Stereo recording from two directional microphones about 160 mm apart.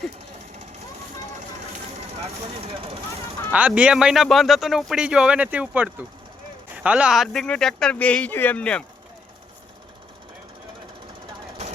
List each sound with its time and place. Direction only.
2.2 s speech: 40° right (ahead or behind)
3.5 s speech: 10° right (ahead or behind); by 8.8 s 5° left (ahead or behind)